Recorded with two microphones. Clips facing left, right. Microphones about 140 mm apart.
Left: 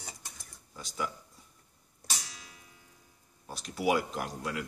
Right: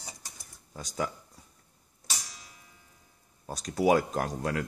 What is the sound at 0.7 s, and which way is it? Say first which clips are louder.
Speech: right 3 dB; 45° right (ahead or behind).